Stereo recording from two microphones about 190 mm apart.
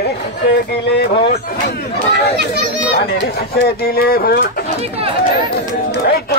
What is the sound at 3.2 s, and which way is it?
Speech, 55° left (ahead or behind).